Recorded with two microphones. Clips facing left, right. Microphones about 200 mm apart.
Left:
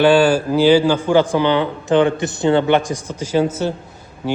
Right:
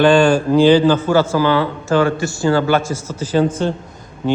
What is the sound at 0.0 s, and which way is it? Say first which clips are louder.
A man's voice: right 1 dB; 5° left (ahead or behind).